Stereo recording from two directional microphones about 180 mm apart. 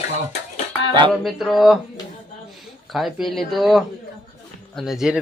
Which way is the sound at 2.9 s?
Centre (ahead or behind).